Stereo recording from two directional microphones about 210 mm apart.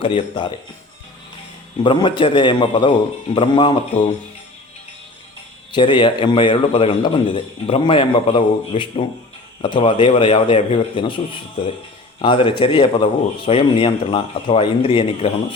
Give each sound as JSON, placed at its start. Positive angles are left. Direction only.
{"t": 0.0, "sound": "a man's voice", "side_deg": 25}
{"t": 1.8, "sound": "a man's voice", "side_deg": 25}
{"t": 5.7, "sound": "a man's voice", "side_deg": 20}
{"t": 12.2, "sound": "a man's voice", "side_deg": 25}